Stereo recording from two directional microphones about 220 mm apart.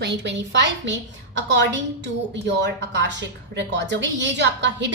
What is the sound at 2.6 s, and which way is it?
A woman's voice, 50° right (ahead or behind).